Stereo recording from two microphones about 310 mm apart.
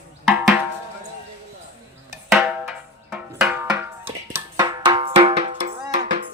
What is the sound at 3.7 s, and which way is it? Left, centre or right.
Music, centre.